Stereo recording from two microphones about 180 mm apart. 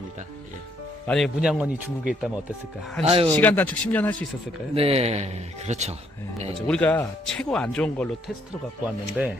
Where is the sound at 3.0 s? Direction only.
35° right (ahead or behind).